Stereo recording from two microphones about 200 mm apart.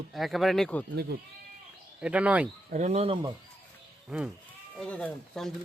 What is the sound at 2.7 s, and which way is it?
Speech, 35° right (ahead or behind).